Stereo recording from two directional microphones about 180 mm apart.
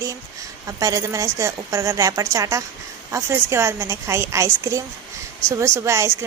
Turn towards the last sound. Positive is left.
turn(degrees=-15)  # may be behind; listen again after turning